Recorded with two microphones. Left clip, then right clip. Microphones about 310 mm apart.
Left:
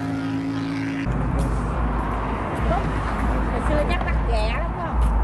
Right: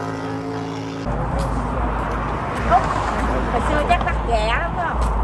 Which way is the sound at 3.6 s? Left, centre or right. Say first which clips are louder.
Right 5 dB; right.